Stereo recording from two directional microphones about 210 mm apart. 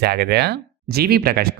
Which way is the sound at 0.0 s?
50° right (ahead or behind).